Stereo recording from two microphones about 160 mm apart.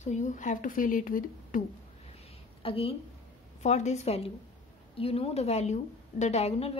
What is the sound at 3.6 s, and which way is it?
A woman's voice, 45° left (ahead or behind).